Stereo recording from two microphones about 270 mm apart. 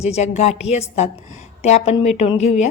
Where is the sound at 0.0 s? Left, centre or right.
Left.